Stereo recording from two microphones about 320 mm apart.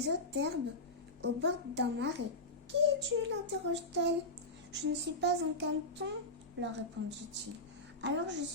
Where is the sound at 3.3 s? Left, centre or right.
Right.